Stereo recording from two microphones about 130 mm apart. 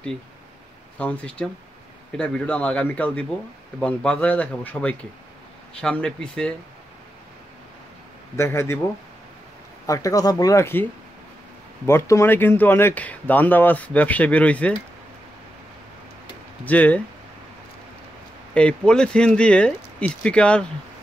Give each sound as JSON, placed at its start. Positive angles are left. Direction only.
{"t": 0.9, "sound": "speech", "side_deg": 10}
{"t": 8.4, "sound": "speech", "side_deg": 20}
{"t": 9.8, "sound": "speech", "side_deg": 25}
{"t": 16.6, "sound": "speech", "side_deg": 10}
{"t": 18.5, "sound": "speech", "side_deg": 10}